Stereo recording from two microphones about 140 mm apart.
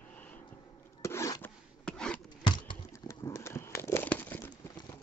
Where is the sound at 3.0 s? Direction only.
20° left (ahead or behind).